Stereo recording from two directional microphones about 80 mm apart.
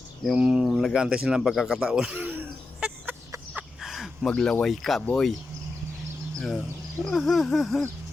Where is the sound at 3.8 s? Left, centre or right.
Centre.